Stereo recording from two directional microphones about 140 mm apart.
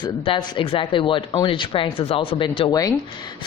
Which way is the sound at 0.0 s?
35° left (ahead or behind).